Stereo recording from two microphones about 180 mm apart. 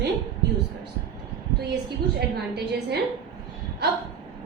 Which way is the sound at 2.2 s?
65° right (ahead or behind).